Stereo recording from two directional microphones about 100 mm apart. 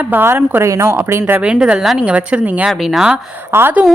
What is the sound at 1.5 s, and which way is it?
A woman's voice, 5° right (ahead or behind).